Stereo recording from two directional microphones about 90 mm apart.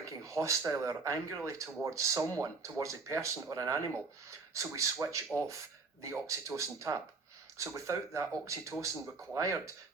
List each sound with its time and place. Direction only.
0.0 s speech: 35° right (ahead or behind)